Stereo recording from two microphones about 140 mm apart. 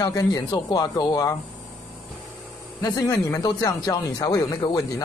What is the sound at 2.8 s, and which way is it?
Speech, 25° left (ahead or behind).